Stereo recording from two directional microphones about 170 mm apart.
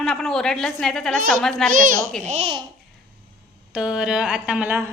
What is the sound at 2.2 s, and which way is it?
Speech, 35° right (ahead or behind).